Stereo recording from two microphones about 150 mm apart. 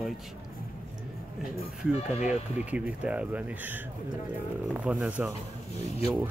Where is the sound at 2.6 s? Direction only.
10° right (ahead or behind).